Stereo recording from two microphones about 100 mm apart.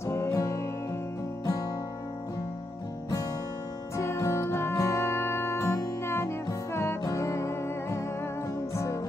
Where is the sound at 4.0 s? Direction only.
30° left (ahead or behind).